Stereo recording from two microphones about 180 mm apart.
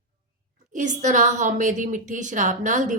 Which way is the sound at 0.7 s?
45° right (ahead or behind).